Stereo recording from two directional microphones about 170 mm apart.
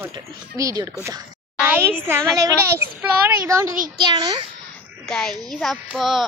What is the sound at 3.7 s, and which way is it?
Speech, 55° right (ahead or behind).